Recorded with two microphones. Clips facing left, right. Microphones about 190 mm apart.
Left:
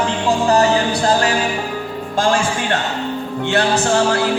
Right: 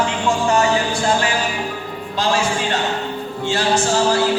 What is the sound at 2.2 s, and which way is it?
Speech, 50° left (ahead or behind).